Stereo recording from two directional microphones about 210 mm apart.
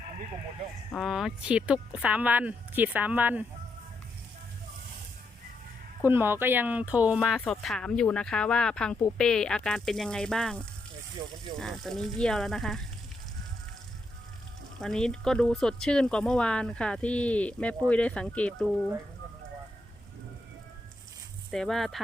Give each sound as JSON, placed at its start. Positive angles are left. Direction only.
{"t": 0.9, "sound": "speech", "side_deg": 0}
{"t": 6.1, "sound": "speech", "side_deg": -10}
{"t": 11.2, "sound": "speech", "side_deg": -20}
{"t": 11.6, "sound": "speech", "side_deg": 0}
{"t": 14.8, "sound": "speech", "side_deg": 5}
{"t": 21.5, "sound": "speech", "side_deg": 0}